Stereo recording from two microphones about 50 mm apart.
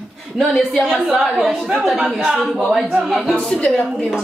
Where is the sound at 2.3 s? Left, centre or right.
Centre.